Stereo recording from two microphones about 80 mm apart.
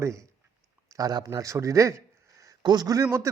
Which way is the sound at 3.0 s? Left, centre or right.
Right.